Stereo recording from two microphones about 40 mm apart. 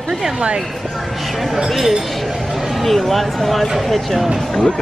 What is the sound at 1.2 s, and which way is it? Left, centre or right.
Speech, centre.